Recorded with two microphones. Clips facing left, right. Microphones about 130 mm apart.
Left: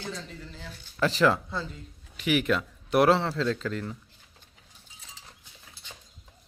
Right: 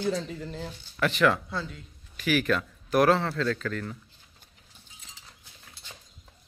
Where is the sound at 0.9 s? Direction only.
30° left (ahead or behind).